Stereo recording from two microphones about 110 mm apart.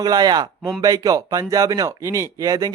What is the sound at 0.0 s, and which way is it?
Speech, 40° right (ahead or behind).